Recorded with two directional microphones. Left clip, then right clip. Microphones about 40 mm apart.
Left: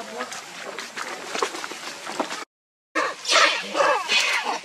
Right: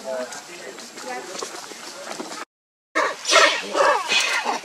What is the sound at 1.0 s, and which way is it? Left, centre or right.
Run, left.